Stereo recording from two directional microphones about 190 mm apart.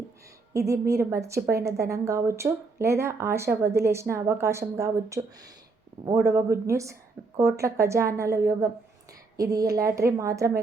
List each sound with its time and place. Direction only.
0.5 s a woman's voice: 15° right (ahead or behind)